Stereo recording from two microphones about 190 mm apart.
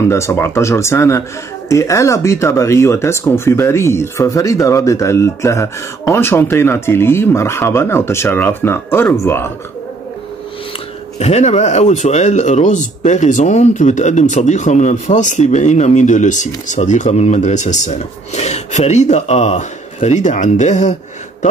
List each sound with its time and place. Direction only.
0.1 s speech: 15° left (ahead or behind)
11.1 s speech: 35° left (ahead or behind)